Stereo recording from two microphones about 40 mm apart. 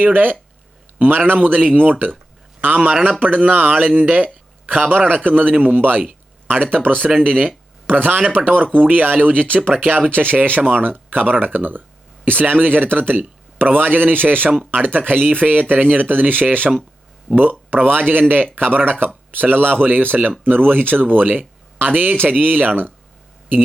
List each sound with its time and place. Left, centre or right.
0.0 s speech: right
1.4 s a man's voice: right
2.8 s speech: right
3.2 s speech: right
4.1 s a sound: right
4.8 s speech: right
7.3 s speech: right
7.9 s speech: right
17.7 s speech: right